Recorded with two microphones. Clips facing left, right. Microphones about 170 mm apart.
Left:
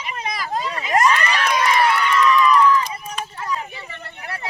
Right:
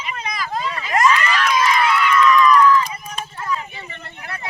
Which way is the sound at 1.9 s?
30° left (ahead or behind).